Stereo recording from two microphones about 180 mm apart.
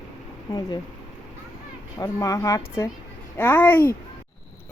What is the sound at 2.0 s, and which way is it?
Speech, 20° left (ahead or behind).